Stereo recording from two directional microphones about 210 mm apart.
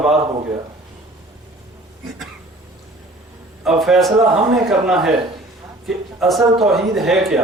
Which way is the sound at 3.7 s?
Centre (ahead or behind).